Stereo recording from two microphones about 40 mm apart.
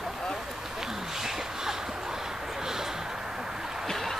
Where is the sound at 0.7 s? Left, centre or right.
Centre.